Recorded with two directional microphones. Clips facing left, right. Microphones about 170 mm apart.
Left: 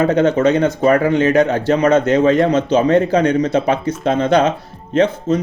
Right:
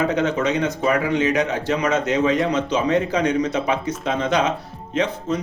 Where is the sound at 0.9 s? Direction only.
50° left (ahead or behind).